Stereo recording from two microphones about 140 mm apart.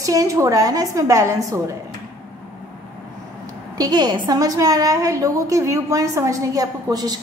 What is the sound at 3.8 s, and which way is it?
A woman's voice, 30° right (ahead or behind).